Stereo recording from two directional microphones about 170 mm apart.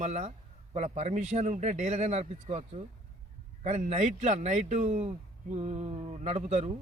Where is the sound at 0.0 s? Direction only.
40° right (ahead or behind).